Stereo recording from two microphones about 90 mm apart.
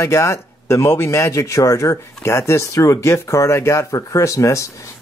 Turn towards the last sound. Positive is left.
turn(degrees=35)  # may be behind; listen again after turning